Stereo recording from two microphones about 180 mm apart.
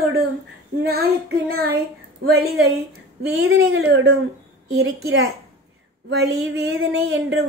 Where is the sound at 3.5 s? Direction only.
70° right (ahead or behind).